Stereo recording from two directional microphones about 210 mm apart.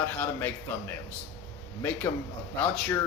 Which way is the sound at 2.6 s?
5° left (ahead or behind).